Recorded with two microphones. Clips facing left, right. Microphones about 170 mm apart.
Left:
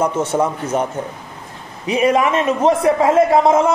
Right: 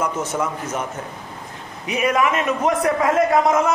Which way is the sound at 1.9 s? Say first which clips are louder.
Left 4 dB; 30° left (ahead or behind).